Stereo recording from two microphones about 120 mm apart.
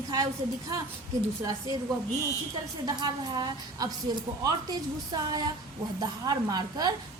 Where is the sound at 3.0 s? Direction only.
35° right (ahead or behind).